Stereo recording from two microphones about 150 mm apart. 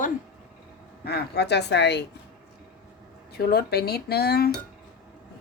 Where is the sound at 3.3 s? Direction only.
90° left.